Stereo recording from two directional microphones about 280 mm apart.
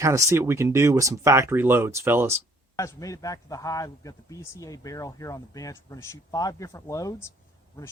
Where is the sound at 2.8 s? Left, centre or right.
Centre.